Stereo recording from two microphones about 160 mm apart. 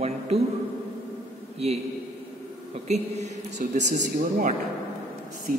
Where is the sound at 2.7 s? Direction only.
45° right (ahead or behind).